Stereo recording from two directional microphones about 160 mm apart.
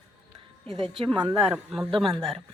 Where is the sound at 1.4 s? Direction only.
Centre (ahead or behind).